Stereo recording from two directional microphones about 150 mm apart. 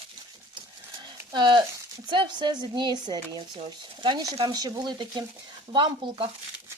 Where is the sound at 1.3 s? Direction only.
30° right (ahead or behind).